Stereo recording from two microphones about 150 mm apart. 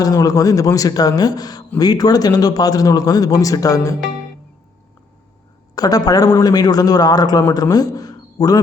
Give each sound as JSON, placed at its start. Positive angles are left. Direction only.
{"t": 0.0, "sound": "a man's voice", "side_deg": 25}
{"t": 5.7, "sound": "a sound", "side_deg": 25}
{"t": 6.1, "sound": "a man's voice", "side_deg": 25}